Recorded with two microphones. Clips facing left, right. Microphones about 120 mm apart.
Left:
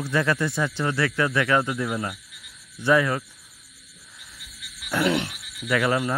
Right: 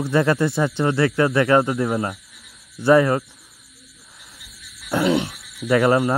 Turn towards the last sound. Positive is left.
turn(degrees=-35)  # may be behind; listen again after turning